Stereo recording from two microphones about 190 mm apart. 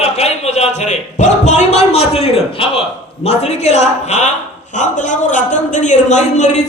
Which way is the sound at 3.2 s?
35° left (ahead or behind).